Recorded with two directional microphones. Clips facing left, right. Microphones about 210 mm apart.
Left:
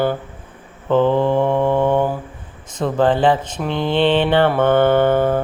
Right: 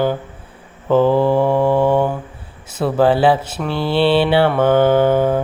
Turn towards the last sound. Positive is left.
turn(degrees=-10)  # may be behind; listen again after turning